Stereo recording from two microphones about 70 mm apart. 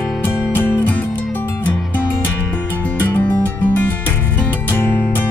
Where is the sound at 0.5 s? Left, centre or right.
Left.